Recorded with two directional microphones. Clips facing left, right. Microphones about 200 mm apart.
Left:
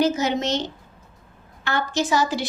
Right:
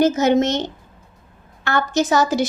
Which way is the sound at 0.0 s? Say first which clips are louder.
Right 6 dB; 50° right (ahead or behind).